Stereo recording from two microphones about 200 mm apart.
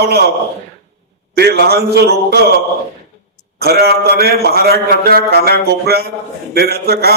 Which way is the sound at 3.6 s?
50° right (ahead or behind).